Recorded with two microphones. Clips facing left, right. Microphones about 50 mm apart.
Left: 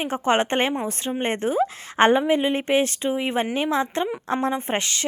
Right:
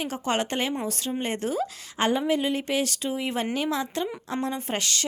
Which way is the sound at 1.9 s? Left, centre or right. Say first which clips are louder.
Left 8 dB; left.